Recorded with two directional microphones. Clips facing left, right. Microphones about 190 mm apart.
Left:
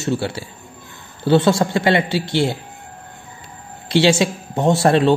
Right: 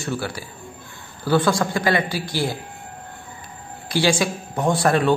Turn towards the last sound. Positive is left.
turn(degrees=25)  # may be behind; listen again after turning